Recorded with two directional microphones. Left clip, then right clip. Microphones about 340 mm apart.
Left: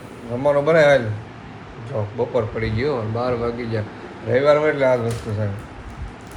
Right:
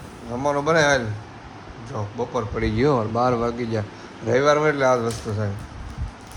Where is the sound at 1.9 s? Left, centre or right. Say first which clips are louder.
Left 5 dB; centre.